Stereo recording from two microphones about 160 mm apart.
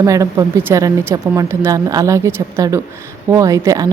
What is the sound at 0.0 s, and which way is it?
A woman's voice, 20° right (ahead or behind).